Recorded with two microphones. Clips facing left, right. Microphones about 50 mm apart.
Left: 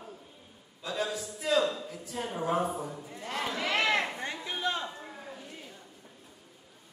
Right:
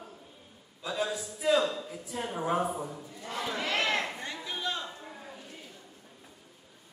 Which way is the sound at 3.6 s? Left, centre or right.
Centre.